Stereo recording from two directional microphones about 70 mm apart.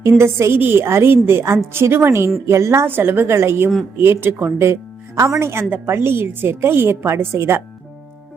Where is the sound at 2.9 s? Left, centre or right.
Right.